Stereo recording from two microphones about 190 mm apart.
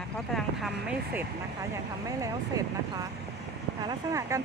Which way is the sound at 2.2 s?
20° right (ahead or behind).